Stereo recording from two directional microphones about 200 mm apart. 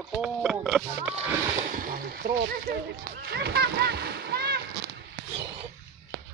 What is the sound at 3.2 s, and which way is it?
Splash, 55° right (ahead or behind).